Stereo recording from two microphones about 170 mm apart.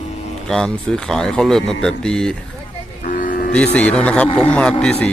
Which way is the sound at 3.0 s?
50° left (ahead or behind).